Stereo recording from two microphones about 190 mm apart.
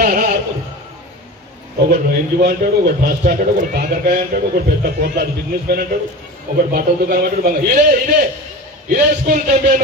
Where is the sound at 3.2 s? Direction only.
50° right (ahead or behind).